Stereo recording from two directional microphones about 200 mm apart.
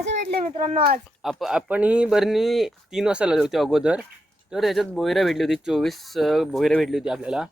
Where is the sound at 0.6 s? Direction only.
40° right (ahead or behind).